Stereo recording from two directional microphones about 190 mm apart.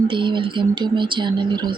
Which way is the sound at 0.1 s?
25° right (ahead or behind).